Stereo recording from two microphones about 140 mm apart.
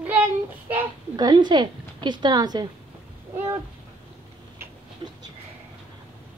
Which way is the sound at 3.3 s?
15° right (ahead or behind).